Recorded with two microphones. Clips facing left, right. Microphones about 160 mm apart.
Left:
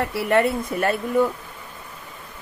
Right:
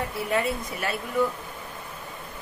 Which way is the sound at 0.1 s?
65° left (ahead or behind).